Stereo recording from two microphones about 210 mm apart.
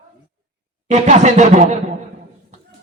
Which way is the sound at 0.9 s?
35° right (ahead or behind).